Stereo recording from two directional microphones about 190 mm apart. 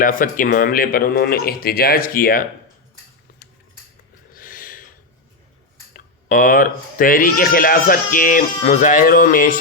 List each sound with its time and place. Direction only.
0.0 s speech: 45° left (ahead or behind)
4.4 s a sound: 45° left (ahead or behind)
5.9 s speech: 45° left (ahead or behind)